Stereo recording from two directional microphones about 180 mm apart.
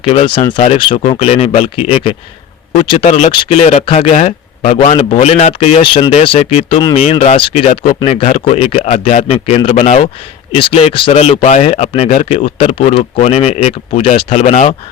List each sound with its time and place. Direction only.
0.0 s speech: 30° left (ahead or behind)
6.9 s speech: 35° left (ahead or behind)